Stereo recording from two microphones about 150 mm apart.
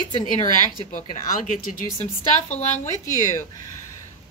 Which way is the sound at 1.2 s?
60° left (ahead or behind).